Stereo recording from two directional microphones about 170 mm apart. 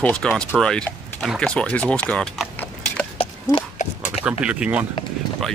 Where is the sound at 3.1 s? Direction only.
35° left (ahead or behind).